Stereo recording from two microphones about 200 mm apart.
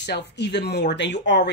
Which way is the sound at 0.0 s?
60° left (ahead or behind).